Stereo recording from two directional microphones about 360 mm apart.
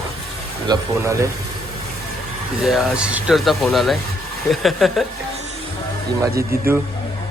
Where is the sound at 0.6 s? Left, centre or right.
Centre.